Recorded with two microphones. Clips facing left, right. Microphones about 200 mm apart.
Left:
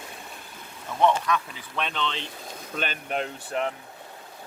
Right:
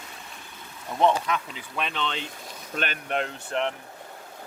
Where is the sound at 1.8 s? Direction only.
5° right (ahead or behind).